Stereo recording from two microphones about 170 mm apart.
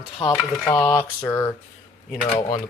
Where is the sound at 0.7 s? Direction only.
15° left (ahead or behind).